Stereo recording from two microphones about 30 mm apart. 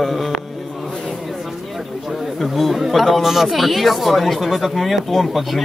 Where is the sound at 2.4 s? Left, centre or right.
Centre.